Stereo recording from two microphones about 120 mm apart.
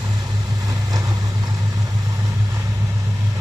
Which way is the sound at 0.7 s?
30° right (ahead or behind).